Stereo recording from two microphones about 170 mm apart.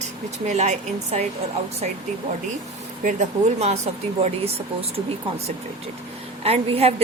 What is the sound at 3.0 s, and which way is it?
A woman's voice, 45° right (ahead or behind).